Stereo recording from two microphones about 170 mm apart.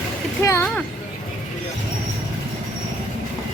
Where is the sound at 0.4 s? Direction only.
15° left (ahead or behind).